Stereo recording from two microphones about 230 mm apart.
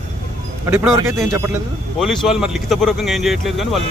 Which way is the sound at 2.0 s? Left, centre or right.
Centre.